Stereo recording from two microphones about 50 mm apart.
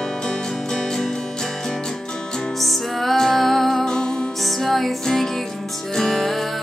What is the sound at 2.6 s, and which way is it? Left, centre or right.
Music, centre.